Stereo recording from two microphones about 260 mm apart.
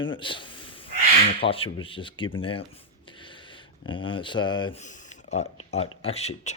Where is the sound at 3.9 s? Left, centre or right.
Centre.